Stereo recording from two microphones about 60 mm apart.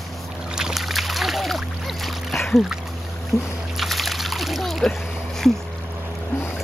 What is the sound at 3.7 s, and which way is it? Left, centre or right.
Splash, centre.